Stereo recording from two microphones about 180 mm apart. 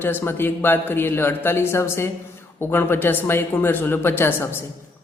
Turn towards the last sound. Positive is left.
turn(degrees=15)  # may be behind; listen again after turning